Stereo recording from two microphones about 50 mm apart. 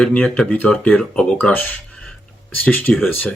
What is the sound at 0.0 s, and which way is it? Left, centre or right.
Speech, left.